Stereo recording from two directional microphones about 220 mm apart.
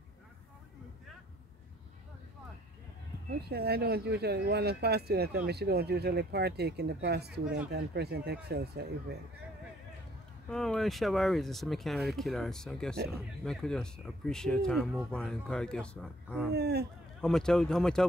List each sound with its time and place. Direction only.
3.4 s speech: 45° right (ahead or behind)
10.5 s speech: centre (ahead or behind)
16.5 s speech: 50° right (ahead or behind)
17.2 s speech: 5° left (ahead or behind)